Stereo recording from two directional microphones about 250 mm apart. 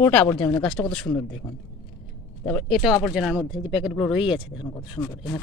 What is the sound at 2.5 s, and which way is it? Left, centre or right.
Speech, centre.